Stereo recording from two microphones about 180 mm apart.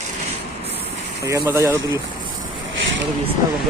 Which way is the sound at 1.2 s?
15° right (ahead or behind).